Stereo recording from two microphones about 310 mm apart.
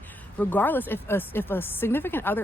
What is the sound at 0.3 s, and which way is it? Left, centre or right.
A woman's voice, centre.